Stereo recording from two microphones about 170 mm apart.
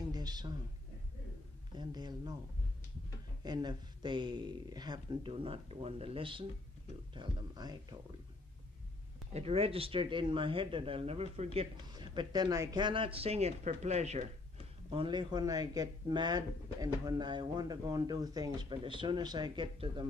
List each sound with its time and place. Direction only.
0.1 s speech: 25° right (ahead or behind)
1.7 s a man's voice: 25° right (ahead or behind)
3.4 s a man's voice: 25° right (ahead or behind)
9.3 s speech: 35° right (ahead or behind)
14.9 s a man's voice: 30° right (ahead or behind)